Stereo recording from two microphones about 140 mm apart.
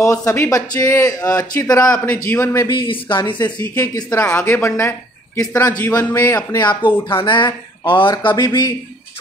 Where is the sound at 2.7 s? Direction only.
40° left (ahead or behind).